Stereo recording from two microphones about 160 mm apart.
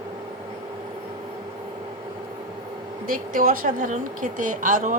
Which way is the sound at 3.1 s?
60° right (ahead or behind).